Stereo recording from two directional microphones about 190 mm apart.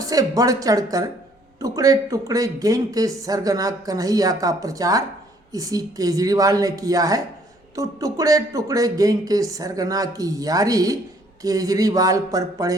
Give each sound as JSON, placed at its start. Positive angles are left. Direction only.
{"t": 0.0, "sound": "speech", "side_deg": -20}